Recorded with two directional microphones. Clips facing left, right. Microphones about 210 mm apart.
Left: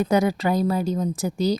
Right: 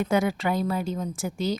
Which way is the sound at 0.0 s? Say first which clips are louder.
Left 4 dB; 40° left (ahead or behind).